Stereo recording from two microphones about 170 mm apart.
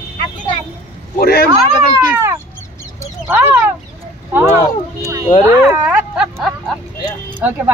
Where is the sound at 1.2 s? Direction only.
65° left (ahead or behind).